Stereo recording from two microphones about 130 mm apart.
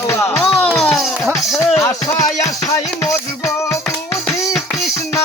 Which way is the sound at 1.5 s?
20° left (ahead or behind).